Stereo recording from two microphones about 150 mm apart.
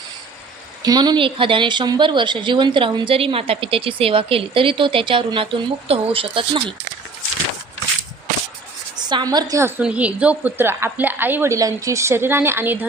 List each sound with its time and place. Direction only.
0.8 s speech: 25° right (ahead or behind)
9.0 s a woman's voice: 30° right (ahead or behind)